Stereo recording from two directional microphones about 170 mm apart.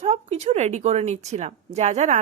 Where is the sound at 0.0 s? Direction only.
40° right (ahead or behind).